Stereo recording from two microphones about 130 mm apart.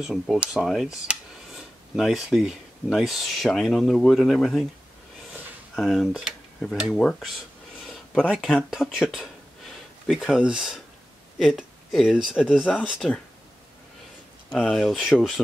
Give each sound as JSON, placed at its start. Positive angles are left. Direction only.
{"t": 0.0, "sound": "speech", "side_deg": 0}
{"t": 5.8, "sound": "speech", "side_deg": 0}
{"t": 14.5, "sound": "speech", "side_deg": 5}